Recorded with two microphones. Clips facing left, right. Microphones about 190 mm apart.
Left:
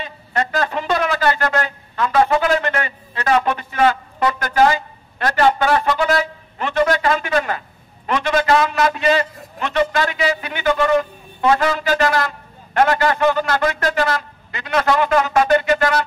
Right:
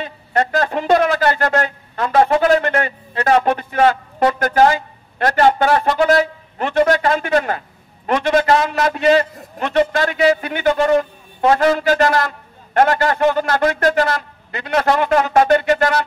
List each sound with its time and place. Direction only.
0.0 s a man's voice: 50° right (ahead or behind)